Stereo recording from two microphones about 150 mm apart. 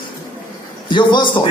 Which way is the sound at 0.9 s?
35° left (ahead or behind).